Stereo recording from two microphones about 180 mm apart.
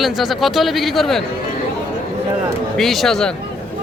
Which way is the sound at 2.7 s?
Centre (ahead or behind).